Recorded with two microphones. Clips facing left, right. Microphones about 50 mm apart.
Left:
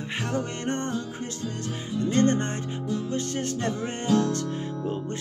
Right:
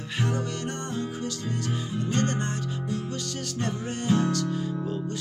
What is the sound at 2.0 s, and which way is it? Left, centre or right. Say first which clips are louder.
Music: left 6 dB; left.